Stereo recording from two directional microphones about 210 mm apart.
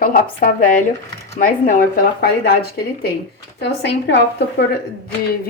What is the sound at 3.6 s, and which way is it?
Speech, 55° left (ahead or behind).